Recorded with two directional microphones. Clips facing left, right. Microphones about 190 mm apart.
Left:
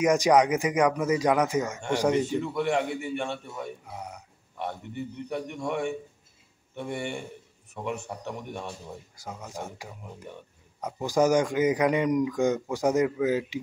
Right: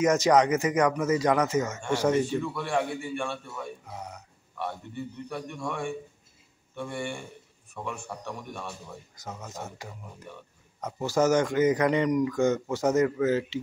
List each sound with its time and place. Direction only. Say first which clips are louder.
0.0 s speech: left 1 dB; 10° left (ahead or behind)
3.8 s a man's voice: left 1 dB; 10° left (ahead or behind)